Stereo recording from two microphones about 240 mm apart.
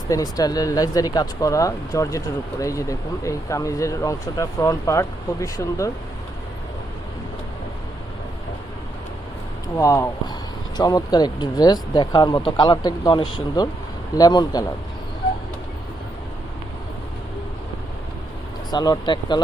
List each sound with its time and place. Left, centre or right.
0.1 s speech: centre
9.7 s speech: centre
18.7 s speech: centre